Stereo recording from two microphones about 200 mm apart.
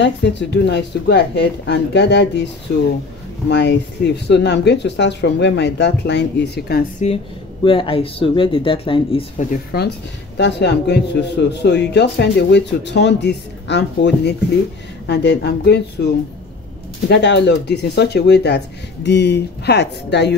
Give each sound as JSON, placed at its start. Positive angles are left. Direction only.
{"t": 0.0, "sound": "a man's voice", "side_deg": 60}
{"t": 7.0, "sound": "speech", "side_deg": 35}
{"t": 9.4, "sound": "speech", "side_deg": 45}
{"t": 10.3, "sound": "a man's voice", "side_deg": 60}
{"t": 17.1, "sound": "a man's voice", "side_deg": 55}